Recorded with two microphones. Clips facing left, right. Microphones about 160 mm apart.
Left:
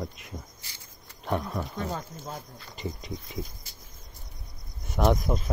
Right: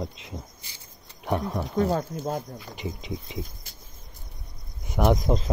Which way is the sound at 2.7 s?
20° right (ahead or behind).